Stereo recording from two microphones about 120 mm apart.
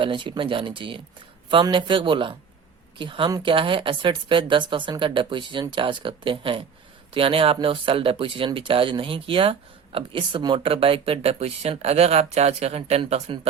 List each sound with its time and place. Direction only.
0.0 s speech: 45° right (ahead or behind)